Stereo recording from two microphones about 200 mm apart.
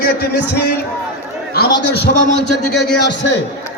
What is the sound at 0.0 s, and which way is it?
Speech, 60° left (ahead or behind).